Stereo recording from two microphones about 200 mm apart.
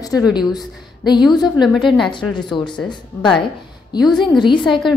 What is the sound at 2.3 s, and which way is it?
Speech, 20° left (ahead or behind).